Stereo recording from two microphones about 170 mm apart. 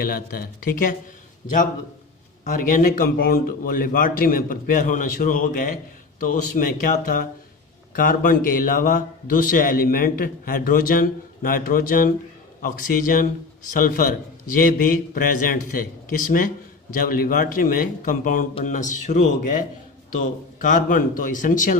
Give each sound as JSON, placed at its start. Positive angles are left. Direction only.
{"t": 0.0, "sound": "a man's voice", "side_deg": 60}
{"t": 2.4, "sound": "a man's voice", "side_deg": 50}